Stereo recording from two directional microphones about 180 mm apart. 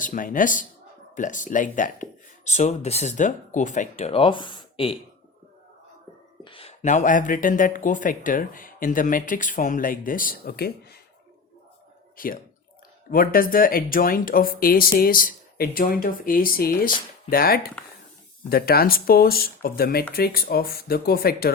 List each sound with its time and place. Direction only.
0.0 s speech: 50° left (ahead or behind); by 4.9 s 30° left (ahead or behind)
6.4 s speech: 30° left (ahead or behind); by 10.9 s 60° left (ahead or behind)
12.1 s speech: 50° left (ahead or behind)